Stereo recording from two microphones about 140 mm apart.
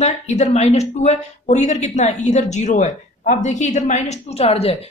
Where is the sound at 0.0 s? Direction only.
55° left (ahead or behind).